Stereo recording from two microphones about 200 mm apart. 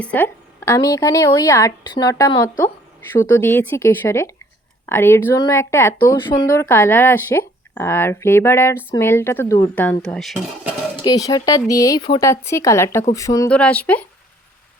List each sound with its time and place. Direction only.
0.0 s speech: 5° left (ahead or behind)
0.8 s a woman's voice: 20° left (ahead or behind); by 10.7 s centre (ahead or behind)
11.0 s speech: 20° left (ahead or behind)